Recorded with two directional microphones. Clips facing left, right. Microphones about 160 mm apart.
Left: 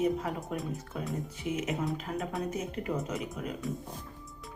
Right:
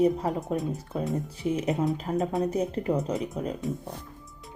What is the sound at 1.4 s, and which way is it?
A woman's voice, 35° right (ahead or behind).